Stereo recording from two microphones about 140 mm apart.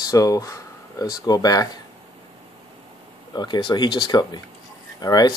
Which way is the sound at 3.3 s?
30° left (ahead or behind).